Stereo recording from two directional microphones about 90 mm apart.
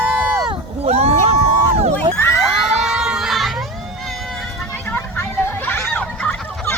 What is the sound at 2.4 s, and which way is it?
Crowd, 5° right (ahead or behind).